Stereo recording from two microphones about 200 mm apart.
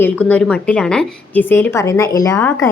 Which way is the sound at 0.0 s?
5° left (ahead or behind).